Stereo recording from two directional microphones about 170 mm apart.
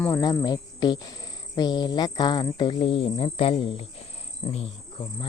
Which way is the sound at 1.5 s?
25° left (ahead or behind).